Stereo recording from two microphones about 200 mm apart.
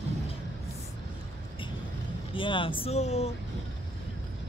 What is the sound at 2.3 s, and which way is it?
Speech, 25° left (ahead or behind).